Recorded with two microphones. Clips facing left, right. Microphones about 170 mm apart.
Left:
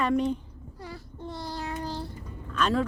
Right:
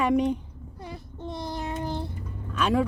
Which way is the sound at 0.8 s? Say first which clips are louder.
Right 2 dB; 20° right (ahead or behind).